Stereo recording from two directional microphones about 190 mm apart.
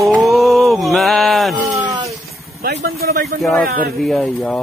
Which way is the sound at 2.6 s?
55° right (ahead or behind).